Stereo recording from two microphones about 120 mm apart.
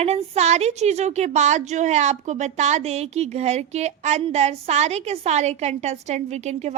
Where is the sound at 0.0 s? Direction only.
65° right (ahead or behind).